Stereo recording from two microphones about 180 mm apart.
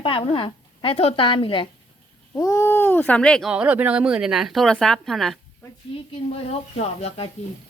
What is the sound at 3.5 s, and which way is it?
A woman's voice, 10° right (ahead or behind).